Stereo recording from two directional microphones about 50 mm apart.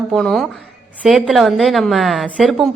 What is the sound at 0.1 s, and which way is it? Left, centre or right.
A woman's voice, centre.